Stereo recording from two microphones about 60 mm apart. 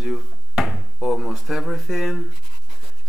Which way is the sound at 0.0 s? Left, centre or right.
Centre.